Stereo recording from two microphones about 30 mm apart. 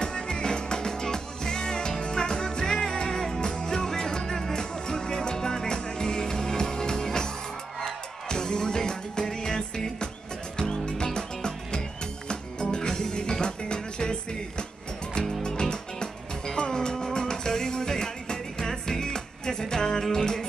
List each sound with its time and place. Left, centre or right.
0.0 s music: left
15.7 s music: left